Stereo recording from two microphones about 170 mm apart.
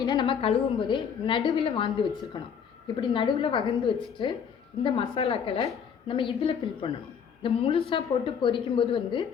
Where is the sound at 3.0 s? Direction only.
30° left (ahead or behind).